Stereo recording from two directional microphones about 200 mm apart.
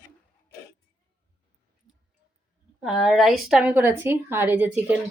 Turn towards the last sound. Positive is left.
turn(degrees=-10)  # may be behind; listen again after turning